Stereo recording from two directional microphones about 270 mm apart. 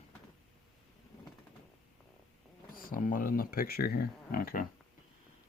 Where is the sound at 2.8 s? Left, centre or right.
Left.